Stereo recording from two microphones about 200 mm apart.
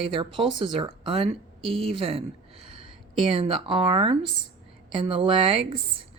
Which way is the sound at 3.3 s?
25° right (ahead or behind).